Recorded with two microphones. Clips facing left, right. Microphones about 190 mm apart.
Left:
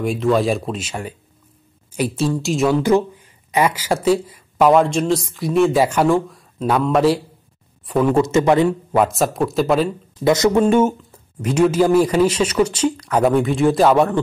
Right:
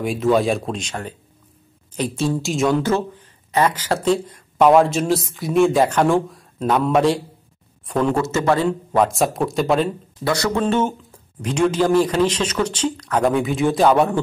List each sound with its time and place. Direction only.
0.0 s speech: centre (ahead or behind)
2.8 s speech: 15° left (ahead or behind)
8.6 s speech: 5° left (ahead or behind)
10.2 s speech: 20° left (ahead or behind)
10.6 s speech: 10° left (ahead or behind)